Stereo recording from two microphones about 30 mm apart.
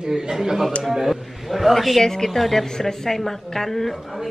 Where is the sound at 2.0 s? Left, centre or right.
Centre.